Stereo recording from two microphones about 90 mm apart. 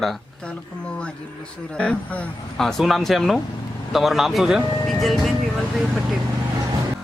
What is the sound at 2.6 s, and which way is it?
Speech, centre (ahead or behind).